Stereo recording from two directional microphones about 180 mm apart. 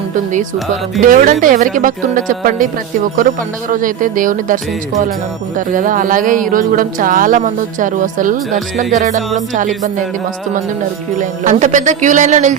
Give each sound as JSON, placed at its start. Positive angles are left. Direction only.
{"t": 1.0, "sound": "speech", "side_deg": -50}
{"t": 9.0, "sound": "music", "side_deg": -40}
{"t": 11.2, "sound": "speech", "side_deg": -45}